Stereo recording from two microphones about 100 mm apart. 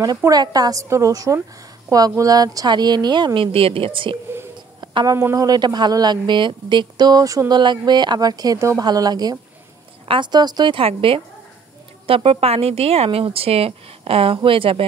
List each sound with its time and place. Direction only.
0.3 s speech: 40° right (ahead or behind); by 4.2 s 60° right (ahead or behind)
5.0 s speech: 35° right (ahead or behind)
10.0 s speech: 55° right (ahead or behind)
10.8 s speech: 65° right (ahead or behind)